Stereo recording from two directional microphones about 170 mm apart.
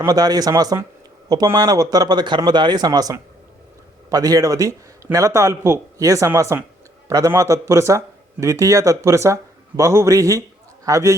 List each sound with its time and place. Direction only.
0.0 s a man's voice: 20° right (ahead or behind)